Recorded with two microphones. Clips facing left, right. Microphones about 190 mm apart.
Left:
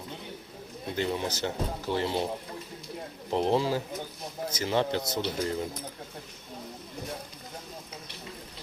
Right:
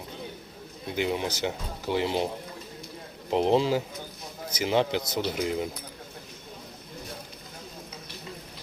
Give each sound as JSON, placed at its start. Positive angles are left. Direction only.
{"t": 0.9, "sound": "speech", "side_deg": -15}
{"t": 3.2, "sound": "speech", "side_deg": -20}